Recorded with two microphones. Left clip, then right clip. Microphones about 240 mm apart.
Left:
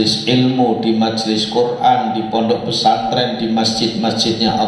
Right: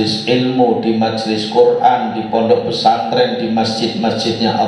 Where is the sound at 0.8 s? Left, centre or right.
Left.